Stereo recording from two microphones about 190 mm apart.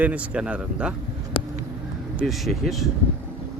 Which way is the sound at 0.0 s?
5° right (ahead or behind).